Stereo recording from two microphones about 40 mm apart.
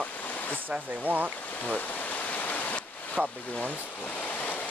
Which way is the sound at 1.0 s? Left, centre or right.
Right.